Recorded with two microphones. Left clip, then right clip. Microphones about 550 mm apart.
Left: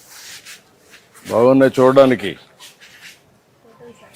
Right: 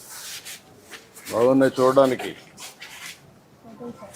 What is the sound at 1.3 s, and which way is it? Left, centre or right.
Speech, left.